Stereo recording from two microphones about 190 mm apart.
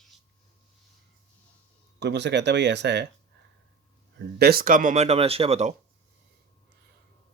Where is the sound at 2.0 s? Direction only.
65° right (ahead or behind).